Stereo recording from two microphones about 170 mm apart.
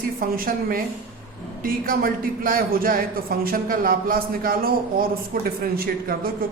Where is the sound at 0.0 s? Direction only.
60° right (ahead or behind).